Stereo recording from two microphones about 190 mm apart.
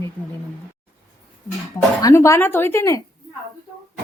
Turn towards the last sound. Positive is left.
turn(degrees=15)  # may be behind; listen again after turning